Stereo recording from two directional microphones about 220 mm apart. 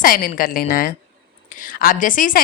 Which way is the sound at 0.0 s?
40° left (ahead or behind).